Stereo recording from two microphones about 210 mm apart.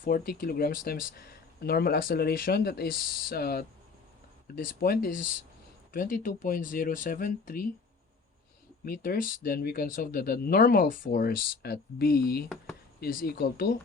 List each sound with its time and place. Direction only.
0.0 s speech: 45° left (ahead or behind)
8.8 s speech: 45° left (ahead or behind)